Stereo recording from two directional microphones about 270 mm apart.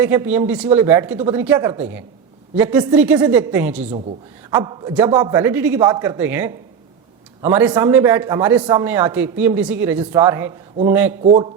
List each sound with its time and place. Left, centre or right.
0.0 s a man's voice: centre
11.2 s a man's voice: right